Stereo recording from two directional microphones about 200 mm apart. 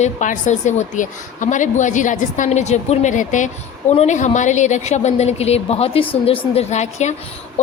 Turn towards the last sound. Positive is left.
turn(degrees=35)  # may be behind; listen again after turning